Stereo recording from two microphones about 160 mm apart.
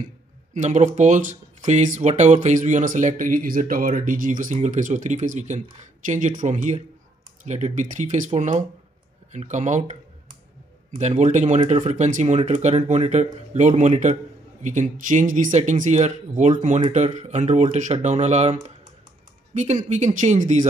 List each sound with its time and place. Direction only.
0.6 s speech: 45° right (ahead or behind)